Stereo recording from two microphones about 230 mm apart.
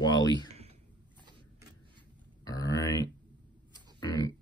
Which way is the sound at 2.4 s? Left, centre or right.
Centre.